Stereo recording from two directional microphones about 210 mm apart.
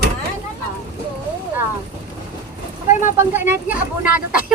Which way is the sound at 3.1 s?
10° right (ahead or behind).